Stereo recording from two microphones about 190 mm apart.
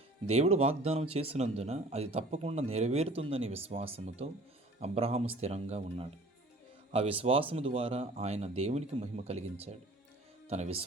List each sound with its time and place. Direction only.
0.3 s speech: 35° right (ahead or behind)